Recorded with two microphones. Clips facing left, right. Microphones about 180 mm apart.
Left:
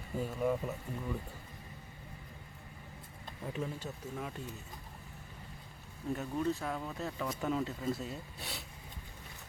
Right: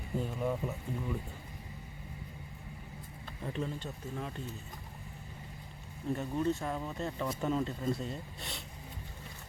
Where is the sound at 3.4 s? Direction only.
5° left (ahead or behind).